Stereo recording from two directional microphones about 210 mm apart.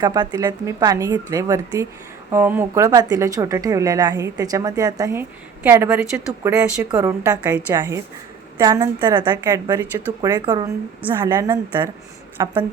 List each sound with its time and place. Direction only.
0.0 s a woman's voice: 20° right (ahead or behind)